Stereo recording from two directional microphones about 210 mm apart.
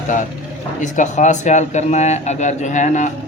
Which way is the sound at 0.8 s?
35° left (ahead or behind).